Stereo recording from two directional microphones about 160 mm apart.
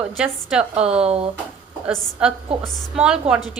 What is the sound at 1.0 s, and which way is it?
Speech, 40° right (ahead or behind).